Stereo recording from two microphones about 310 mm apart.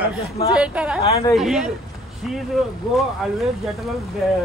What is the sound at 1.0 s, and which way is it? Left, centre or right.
Speech, centre.